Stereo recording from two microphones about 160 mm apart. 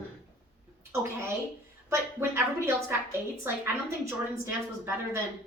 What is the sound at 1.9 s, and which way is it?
A woman's voice, 15° right (ahead or behind).